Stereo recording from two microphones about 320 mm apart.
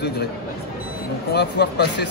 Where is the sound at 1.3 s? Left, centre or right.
Left.